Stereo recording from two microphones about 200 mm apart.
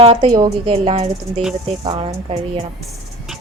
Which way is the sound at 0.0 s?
30° right (ahead or behind).